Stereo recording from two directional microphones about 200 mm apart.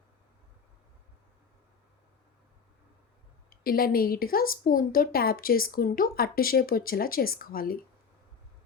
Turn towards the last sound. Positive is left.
turn(degrees=45)  # may be behind; listen again after turning